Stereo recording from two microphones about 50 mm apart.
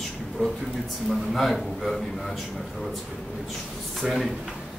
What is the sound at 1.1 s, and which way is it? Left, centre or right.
A man's voice, centre.